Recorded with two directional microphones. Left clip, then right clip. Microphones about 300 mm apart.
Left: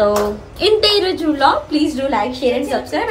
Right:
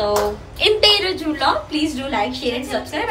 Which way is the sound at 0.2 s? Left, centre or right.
Centre.